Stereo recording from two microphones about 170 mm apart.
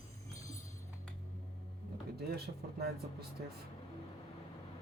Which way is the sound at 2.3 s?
65° right (ahead or behind).